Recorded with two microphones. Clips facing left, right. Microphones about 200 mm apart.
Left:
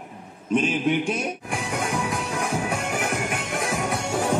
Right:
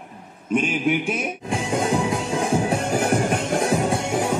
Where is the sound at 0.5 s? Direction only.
Centre (ahead or behind).